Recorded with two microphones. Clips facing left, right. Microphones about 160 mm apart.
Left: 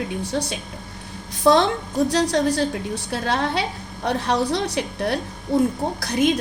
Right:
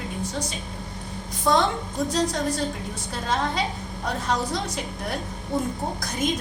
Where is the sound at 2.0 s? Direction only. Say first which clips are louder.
Left 4 dB; 75° left (ahead or behind).